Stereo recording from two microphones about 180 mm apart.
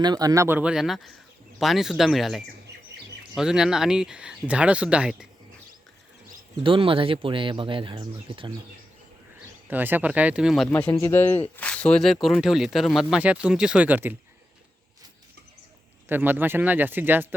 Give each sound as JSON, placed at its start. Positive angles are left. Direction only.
{"t": 0.0, "sound": "speech", "side_deg": -20}
{"t": 6.6, "sound": "speech", "side_deg": -30}
{"t": 9.6, "sound": "speech", "side_deg": -10}
{"t": 10.8, "sound": "speech", "side_deg": 15}
{"t": 16.0, "sound": "speech", "side_deg": -10}